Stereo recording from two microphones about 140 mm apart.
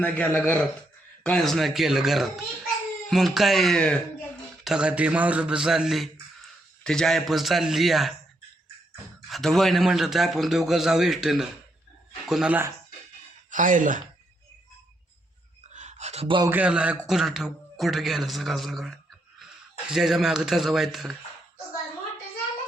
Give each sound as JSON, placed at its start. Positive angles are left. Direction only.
{"t": 0.0, "sound": "a man's voice", "side_deg": 10}
{"t": 9.3, "sound": "a man's voice", "side_deg": 0}
{"t": 13.5, "sound": "speech", "side_deg": -70}
{"t": 15.7, "sound": "a sound", "side_deg": -55}
{"t": 16.2, "sound": "speech", "side_deg": -35}
{"t": 16.5, "sound": "speech", "side_deg": -10}